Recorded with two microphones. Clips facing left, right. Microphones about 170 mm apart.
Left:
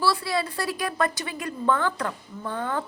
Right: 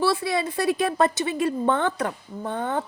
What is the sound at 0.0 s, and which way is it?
Speech, 20° right (ahead or behind).